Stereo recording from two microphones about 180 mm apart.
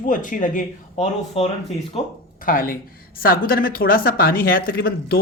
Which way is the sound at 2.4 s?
50° left (ahead or behind).